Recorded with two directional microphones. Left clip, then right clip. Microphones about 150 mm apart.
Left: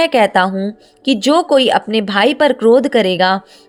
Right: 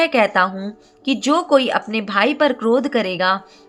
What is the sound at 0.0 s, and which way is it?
Speech, 35° left (ahead or behind).